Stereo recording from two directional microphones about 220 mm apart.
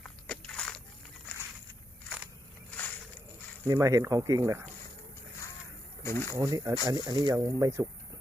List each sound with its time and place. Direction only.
0.0 s biting: 5° left (ahead or behind)
2.2 s crackle: 5° left (ahead or behind)
3.7 s speech: 15° right (ahead or behind)
6.0 s speech: 10° left (ahead or behind)
6.3 s speech: 15° right (ahead or behind)